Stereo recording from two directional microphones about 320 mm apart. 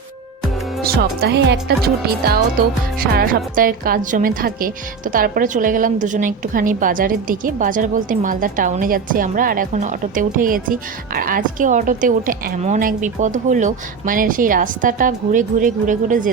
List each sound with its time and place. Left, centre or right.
0.9 s a woman's voice: right